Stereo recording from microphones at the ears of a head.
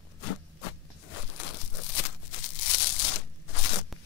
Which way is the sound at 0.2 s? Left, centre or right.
Left.